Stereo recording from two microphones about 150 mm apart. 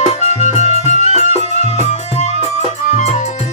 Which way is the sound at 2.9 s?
50° left (ahead or behind).